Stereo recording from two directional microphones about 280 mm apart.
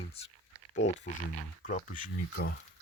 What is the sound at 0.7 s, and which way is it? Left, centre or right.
Speech, left.